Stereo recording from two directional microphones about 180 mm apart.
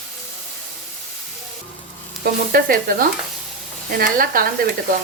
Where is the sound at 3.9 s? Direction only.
55° right (ahead or behind).